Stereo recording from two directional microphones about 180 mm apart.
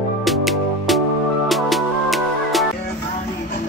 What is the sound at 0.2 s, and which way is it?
Music, centre (ahead or behind).